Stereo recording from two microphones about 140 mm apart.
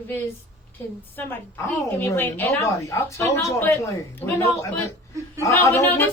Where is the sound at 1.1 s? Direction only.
15° left (ahead or behind).